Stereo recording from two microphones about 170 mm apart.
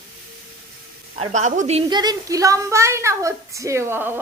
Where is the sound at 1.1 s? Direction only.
40° right (ahead or behind).